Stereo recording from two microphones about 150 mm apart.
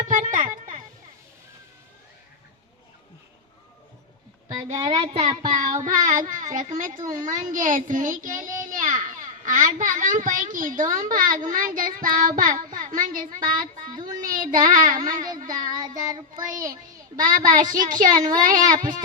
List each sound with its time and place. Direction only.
0.0 s a sound: 60° right (ahead or behind)
4.8 s a child's voice: 25° right (ahead or behind)
5.8 s a child's voice: 60° right (ahead or behind)
15.4 s child singing: 65° right (ahead or behind)
16.0 s child singing: 25° right (ahead or behind)
17.2 s speech: 65° right (ahead or behind)
18.1 s a child's voice: 25° right (ahead or behind)
18.3 s speech: 65° right (ahead or behind)